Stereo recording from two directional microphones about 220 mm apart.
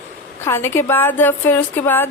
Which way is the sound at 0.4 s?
10° left (ahead or behind).